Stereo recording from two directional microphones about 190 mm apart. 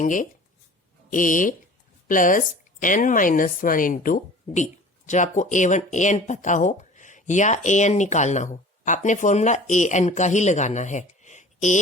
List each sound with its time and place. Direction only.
0.0 s speech: 45° left (ahead or behind)